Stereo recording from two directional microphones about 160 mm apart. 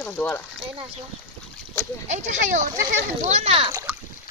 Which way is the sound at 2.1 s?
50° right (ahead or behind).